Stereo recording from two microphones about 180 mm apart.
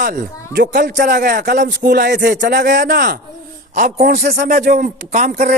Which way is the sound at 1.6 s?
65° right (ahead or behind).